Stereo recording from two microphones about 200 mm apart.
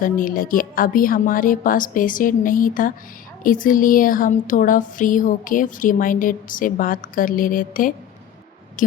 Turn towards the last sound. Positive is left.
turn(degrees=40)  # may be behind; listen again after turning